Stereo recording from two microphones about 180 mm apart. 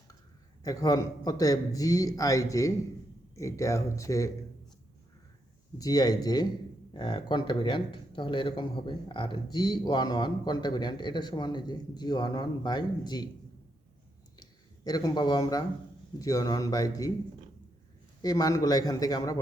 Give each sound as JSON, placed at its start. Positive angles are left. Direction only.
{"t": 0.6, "sound": "speech", "side_deg": 20}
{"t": 5.7, "sound": "speech", "side_deg": 20}
{"t": 14.8, "sound": "speech", "side_deg": 20}
{"t": 18.2, "sound": "speech", "side_deg": 20}